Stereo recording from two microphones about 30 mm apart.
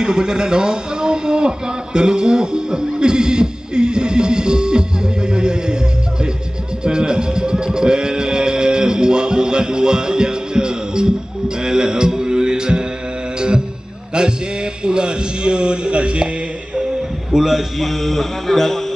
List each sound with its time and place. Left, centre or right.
0.0 s a man's voice: right
2.0 s neigh: right
6.8 s music: right
14.1 s a man's voice: right
17.3 s a man's voice: centre
17.7 s speech: centre